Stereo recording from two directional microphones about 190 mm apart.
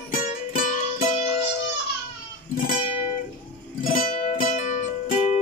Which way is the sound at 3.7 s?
45° left (ahead or behind).